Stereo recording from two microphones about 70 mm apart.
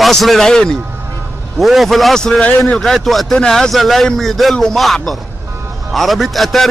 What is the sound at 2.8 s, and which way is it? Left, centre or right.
A man's voice, centre.